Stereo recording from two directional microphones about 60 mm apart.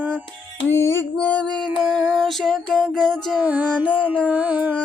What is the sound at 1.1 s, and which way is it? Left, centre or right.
Female singing, left.